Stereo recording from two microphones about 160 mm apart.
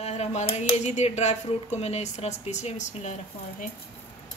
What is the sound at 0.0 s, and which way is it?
Speech, 45° left (ahead or behind).